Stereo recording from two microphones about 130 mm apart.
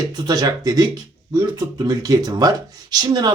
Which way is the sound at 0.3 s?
30° right (ahead or behind).